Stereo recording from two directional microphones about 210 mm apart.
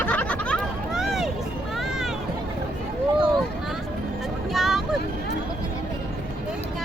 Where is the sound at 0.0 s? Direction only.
5° left (ahead or behind).